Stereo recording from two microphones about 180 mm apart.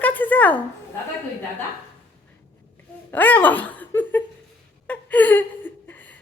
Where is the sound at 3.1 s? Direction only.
10° left (ahead or behind).